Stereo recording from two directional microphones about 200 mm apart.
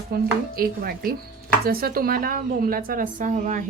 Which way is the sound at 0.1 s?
45° right (ahead or behind).